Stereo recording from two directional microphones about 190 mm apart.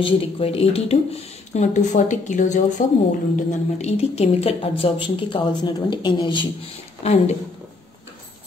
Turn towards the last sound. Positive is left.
turn(degrees=35)  # may be behind; listen again after turning